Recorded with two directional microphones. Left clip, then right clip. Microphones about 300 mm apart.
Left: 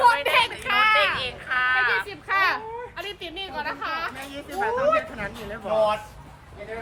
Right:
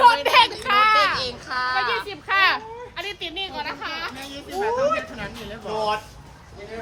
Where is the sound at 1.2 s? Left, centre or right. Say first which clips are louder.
Left 1 dB; centre.